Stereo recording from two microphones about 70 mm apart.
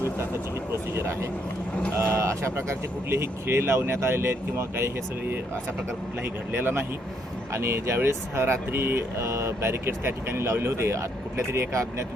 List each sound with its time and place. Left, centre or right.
0.7 s vehicle: right
2.0 s speech: right
6.5 s speech: right